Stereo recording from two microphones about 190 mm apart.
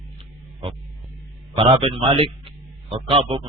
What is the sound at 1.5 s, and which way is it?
Speech, 25° right (ahead or behind).